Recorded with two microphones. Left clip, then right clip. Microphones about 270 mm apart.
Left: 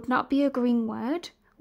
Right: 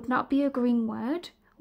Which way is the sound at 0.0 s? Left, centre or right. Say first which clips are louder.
Left 2 dB; centre.